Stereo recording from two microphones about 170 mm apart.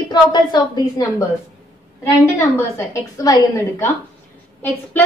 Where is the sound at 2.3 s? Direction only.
15° left (ahead or behind).